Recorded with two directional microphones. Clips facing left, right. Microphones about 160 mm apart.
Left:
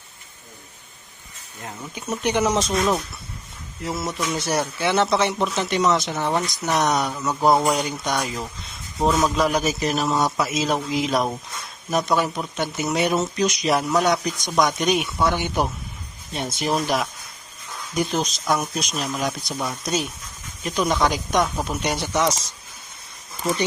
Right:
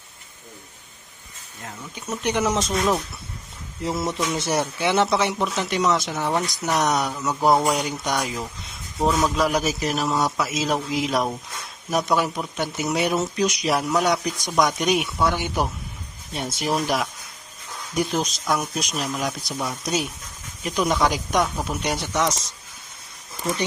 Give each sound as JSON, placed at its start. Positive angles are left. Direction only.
{"t": 2.0, "sound": "a man's voice", "side_deg": 5}
{"t": 4.4, "sound": "a man's voice", "side_deg": -20}